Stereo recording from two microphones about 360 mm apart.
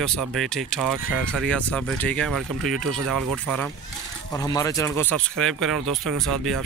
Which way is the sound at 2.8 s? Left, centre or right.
Right.